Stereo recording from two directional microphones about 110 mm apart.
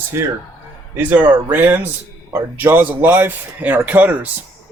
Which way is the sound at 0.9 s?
15° right (ahead or behind).